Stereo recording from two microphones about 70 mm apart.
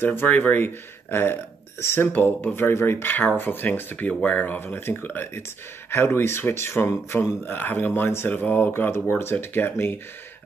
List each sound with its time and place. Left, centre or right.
0.0 s speech: left
7.4 s speech: left